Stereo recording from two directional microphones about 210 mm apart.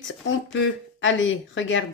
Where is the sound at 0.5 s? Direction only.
65° left (ahead or behind).